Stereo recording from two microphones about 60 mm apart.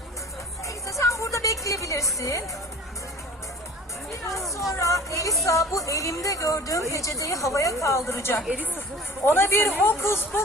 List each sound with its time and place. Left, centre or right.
0.6 s music: left
2.1 s speech: left
4.4 s speech: left